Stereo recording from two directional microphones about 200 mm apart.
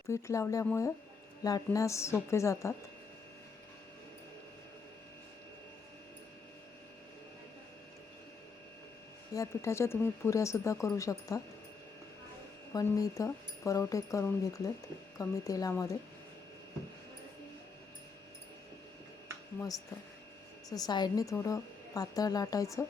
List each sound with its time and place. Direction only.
0.1 s speech: 15° left (ahead or behind)
9.3 s speech: 15° left (ahead or behind)
12.7 s speech: 15° left (ahead or behind)
20.7 s speech: 20° left (ahead or behind)